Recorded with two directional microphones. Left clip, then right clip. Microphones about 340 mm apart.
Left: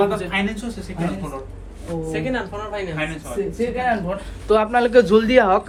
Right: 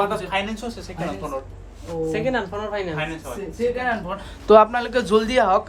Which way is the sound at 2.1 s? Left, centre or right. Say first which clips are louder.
Right 1 dB; right.